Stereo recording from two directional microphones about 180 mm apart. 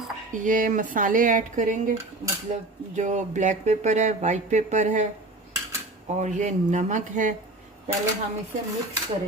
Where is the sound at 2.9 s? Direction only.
40° right (ahead or behind).